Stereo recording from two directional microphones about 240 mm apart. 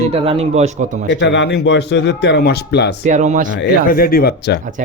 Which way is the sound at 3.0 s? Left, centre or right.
Right.